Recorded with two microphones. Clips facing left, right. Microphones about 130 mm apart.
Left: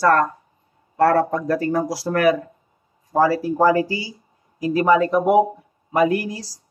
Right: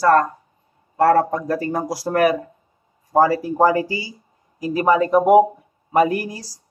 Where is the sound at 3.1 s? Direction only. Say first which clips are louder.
Right 1 dB; 15° right (ahead or behind).